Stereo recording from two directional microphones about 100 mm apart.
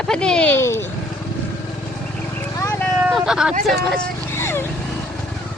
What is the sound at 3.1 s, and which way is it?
Speech, 5° right (ahead or behind).